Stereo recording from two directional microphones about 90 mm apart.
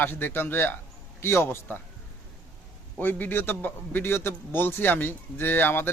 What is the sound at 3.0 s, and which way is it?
A man's voice, 20° left (ahead or behind).